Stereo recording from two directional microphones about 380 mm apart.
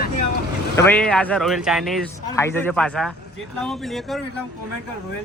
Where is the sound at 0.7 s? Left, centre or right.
Centre.